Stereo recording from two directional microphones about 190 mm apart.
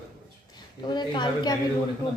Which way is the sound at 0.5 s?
25° left (ahead or behind).